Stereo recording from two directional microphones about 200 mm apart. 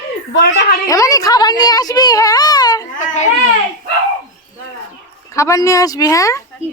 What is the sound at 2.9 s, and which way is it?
Speech, 35° left (ahead or behind).